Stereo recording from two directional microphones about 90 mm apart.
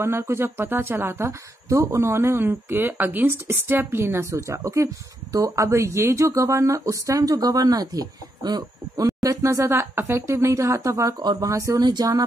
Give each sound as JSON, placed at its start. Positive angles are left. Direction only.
{"t": 0.0, "sound": "speech", "side_deg": -30}